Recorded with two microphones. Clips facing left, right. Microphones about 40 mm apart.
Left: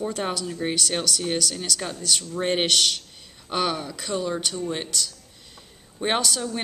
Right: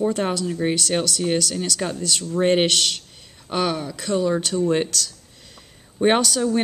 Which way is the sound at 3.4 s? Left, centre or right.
Centre.